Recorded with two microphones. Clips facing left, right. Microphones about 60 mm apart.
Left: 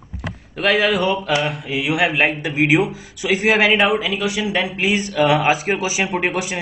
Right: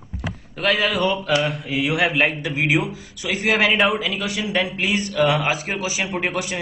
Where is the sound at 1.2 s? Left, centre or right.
Centre.